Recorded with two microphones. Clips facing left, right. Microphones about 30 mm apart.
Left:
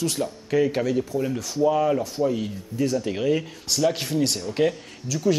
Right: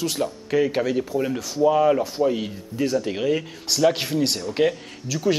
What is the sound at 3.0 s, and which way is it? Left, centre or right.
Speech, centre.